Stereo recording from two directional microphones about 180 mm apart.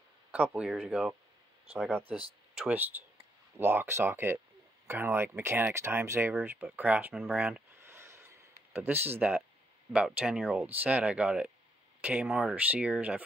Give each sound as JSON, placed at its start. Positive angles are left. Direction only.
{"t": 0.3, "sound": "speech", "side_deg": -10}
{"t": 2.0, "sound": "speech", "side_deg": -30}
{"t": 2.5, "sound": "speech", "side_deg": -5}